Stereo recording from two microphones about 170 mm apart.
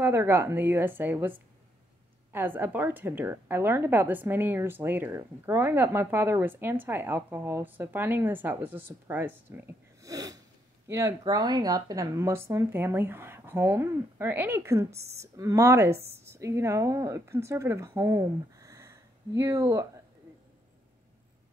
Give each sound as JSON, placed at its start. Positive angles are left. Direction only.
{"t": 0.0, "sound": "speech", "side_deg": -15}
{"t": 10.0, "sound": "snort", "side_deg": -20}
{"t": 10.9, "sound": "speech", "side_deg": -15}